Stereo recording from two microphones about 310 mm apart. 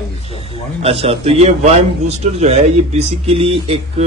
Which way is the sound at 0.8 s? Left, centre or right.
Centre.